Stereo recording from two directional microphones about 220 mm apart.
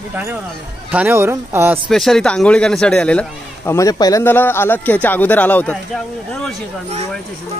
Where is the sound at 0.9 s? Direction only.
10° right (ahead or behind).